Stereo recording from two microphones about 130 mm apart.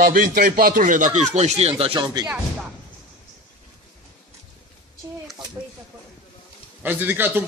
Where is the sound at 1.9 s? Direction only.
30° right (ahead or behind).